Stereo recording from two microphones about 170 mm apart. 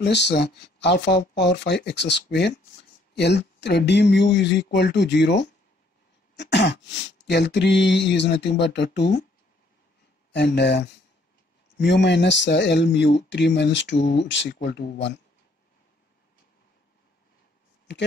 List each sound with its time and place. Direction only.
0.0 s speech: 85° left
10.3 s speech: 80° left
11.8 s speech: 90° left